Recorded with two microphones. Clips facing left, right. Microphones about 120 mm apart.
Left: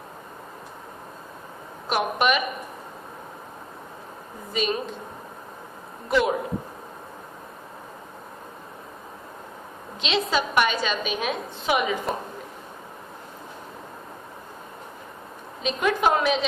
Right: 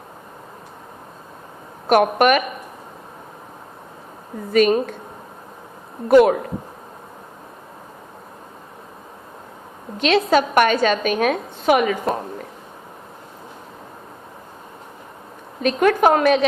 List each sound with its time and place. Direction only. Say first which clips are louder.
1.9 s a woman's voice: right 8 dB; 50° right (ahead or behind)
4.5 s a woman's voice: right 11 dB; 55° right (ahead or behind)
6.1 s a woman's voice: right 10 dB; 50° right (ahead or behind)
10.0 s a woman's voice: right 8 dB; 55° right (ahead or behind)
15.6 s a woman's voice: right 7 dB; 55° right (ahead or behind)